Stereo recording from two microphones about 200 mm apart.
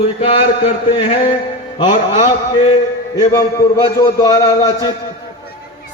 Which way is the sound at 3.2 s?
20° left (ahead or behind).